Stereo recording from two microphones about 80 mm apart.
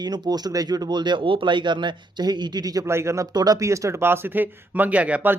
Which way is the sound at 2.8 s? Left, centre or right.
Right.